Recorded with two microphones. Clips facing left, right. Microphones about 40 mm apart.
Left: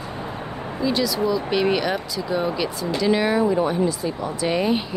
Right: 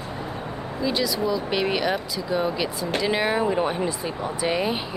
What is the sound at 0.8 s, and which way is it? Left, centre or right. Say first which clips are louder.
Speech: left 3 dB; centre.